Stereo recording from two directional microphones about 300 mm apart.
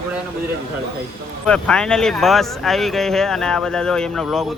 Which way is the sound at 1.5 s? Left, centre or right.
Centre.